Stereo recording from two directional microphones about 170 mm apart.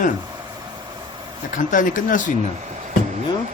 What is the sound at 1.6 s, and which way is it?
Speech, 50° left (ahead or behind).